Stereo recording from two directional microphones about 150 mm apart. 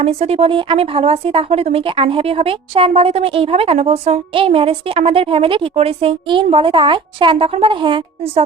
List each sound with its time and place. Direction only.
0.0 s speech: 45° right (ahead or behind)